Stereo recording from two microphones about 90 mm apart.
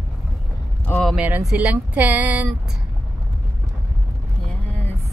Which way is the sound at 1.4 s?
5° right (ahead or behind).